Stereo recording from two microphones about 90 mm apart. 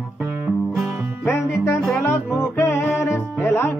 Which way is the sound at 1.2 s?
25° left (ahead or behind).